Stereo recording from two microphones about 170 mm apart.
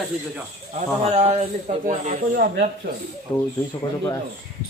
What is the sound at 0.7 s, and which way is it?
Speech, 40° right (ahead or behind).